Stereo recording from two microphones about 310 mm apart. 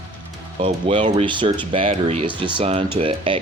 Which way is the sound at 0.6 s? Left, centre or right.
Centre.